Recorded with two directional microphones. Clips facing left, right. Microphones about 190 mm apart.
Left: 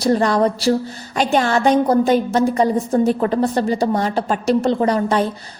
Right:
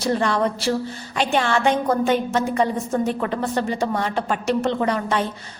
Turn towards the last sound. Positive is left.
turn(degrees=35)  # may be behind; listen again after turning